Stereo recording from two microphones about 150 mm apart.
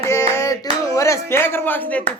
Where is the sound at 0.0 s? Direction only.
20° left (ahead or behind).